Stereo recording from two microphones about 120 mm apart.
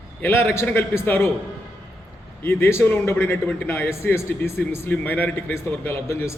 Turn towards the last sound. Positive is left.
turn(degrees=20)  # may be behind; listen again after turning